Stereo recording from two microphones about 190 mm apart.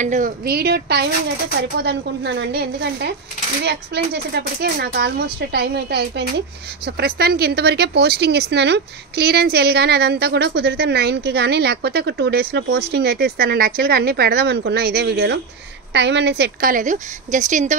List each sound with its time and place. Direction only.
0.0 s a woman's voice: 40° right (ahead or behind)
0.5 s a woman's voice: 55° right (ahead or behind); by 17.7 s 40° right (ahead or behind)